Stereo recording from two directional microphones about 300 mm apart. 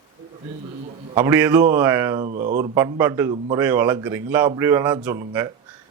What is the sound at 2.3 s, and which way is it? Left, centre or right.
Speech, right.